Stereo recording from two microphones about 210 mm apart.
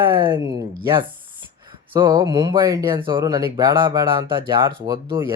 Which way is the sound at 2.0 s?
20° right (ahead or behind).